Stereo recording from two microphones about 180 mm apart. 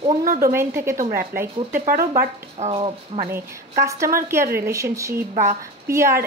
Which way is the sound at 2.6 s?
35° right (ahead or behind).